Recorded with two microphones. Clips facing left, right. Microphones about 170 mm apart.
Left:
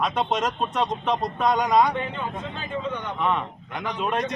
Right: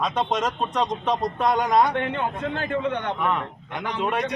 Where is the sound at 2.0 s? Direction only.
65° right (ahead or behind).